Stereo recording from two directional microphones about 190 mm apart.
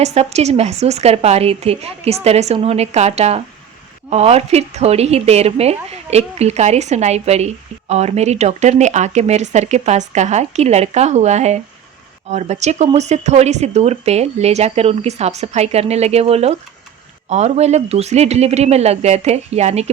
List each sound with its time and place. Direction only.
0.0 s a woman's voice: 35° right (ahead or behind)